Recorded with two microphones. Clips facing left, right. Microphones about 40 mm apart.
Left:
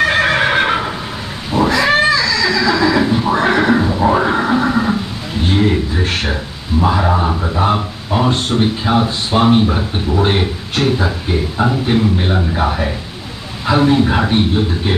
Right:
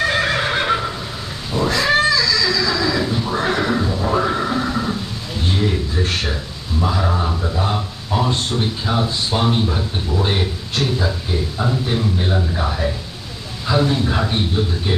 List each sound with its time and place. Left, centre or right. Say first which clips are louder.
0.0 s neigh: left 5 dB; left
1.5 s cat: left 6 dB; left
1.9 s neigh: left 3 dB; left
6.8 s speech: left 6 dB; left